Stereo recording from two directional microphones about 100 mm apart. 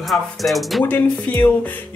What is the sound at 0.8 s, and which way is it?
Speech, 20° left (ahead or behind).